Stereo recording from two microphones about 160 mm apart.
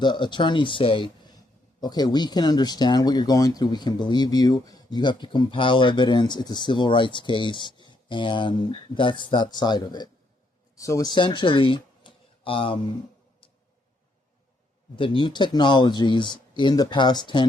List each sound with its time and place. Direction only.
0.0 s speech: 30° left (ahead or behind)
14.9 s speech: 30° left (ahead or behind)